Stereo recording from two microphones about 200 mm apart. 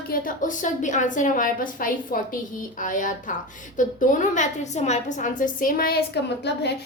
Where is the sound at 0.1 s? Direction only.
40° left (ahead or behind).